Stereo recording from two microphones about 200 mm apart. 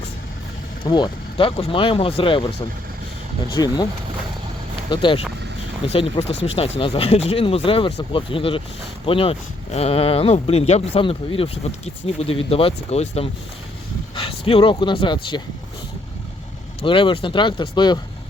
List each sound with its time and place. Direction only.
0.9 s speech: 20° left (ahead or behind)
3.5 s speech: 20° left (ahead or behind)
4.9 s speech: 25° left (ahead or behind)
16.8 s speech: 25° left (ahead or behind)